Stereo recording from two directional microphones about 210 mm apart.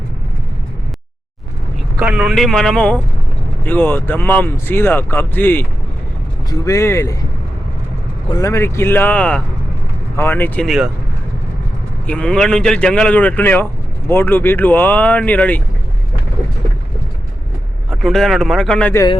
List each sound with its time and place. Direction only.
2.0 s a man's voice: 5° right (ahead or behind); by 7.3 s 15° left (ahead or behind)
8.3 s speech: 15° left (ahead or behind); by 10.9 s centre (ahead or behind)
12.0 s a man's voice: 5° left (ahead or behind)
17.9 s a man's voice: centre (ahead or behind)